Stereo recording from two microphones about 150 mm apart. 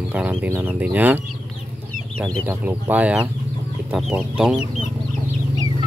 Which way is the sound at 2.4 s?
10° right (ahead or behind).